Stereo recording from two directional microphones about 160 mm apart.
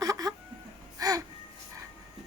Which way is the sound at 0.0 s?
25° right (ahead or behind).